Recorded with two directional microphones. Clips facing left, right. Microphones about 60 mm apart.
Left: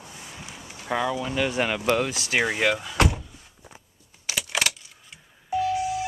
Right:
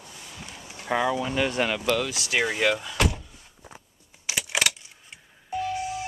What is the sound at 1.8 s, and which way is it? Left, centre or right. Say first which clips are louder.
Speech: left 2 dB; left.